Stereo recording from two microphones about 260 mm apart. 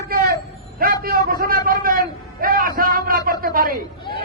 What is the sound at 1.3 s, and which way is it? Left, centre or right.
A man's voice, right.